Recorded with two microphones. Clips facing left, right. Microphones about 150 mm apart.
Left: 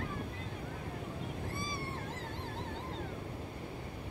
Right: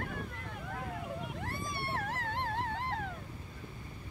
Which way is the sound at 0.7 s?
70° right (ahead or behind).